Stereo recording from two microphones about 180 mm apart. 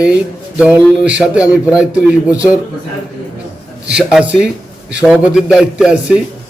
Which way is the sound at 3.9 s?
5° right (ahead or behind).